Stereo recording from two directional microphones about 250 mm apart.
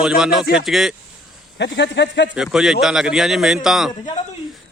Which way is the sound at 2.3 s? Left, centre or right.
Centre.